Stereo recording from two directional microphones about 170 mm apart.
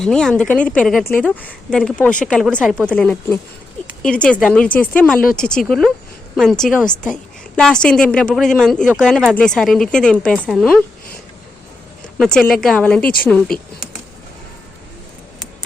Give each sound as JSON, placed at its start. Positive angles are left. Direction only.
{"t": 0.0, "sound": "a woman's voice", "side_deg": 5}
{"t": 12.1, "sound": "a woman's voice", "side_deg": 5}